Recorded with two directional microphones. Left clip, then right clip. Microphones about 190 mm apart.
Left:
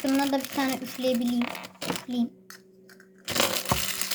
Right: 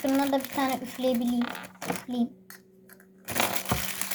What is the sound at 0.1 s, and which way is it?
Speech, 10° left (ahead or behind).